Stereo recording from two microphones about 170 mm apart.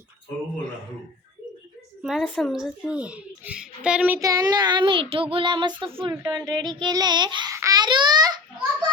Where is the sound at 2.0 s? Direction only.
5° right (ahead or behind); by 8.4 s 25° right (ahead or behind).